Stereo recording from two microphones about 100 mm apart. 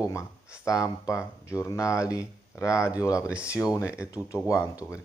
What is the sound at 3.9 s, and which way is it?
Speech, 10° right (ahead or behind).